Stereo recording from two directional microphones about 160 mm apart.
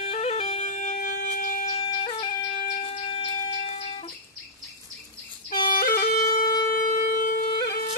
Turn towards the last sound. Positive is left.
turn(degrees=60)  # may be behind; listen again after turning